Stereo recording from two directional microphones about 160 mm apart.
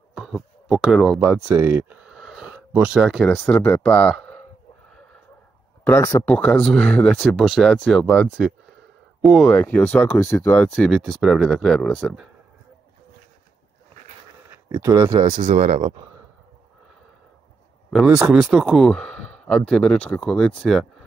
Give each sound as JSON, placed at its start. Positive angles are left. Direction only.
{"t": 0.1, "sound": "a sound", "side_deg": 0}
{"t": 1.2, "sound": "speech", "side_deg": -10}
{"t": 5.9, "sound": "speech", "side_deg": 20}
{"t": 6.3, "sound": "speech", "side_deg": 5}
{"t": 10.7, "sound": "speech", "side_deg": 0}
{"t": 14.8, "sound": "speech", "side_deg": -20}
{"t": 15.2, "sound": "speech", "side_deg": -45}
{"t": 17.9, "sound": "speech", "side_deg": -5}